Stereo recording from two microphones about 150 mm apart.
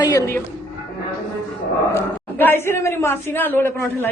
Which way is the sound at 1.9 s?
15° left (ahead or behind).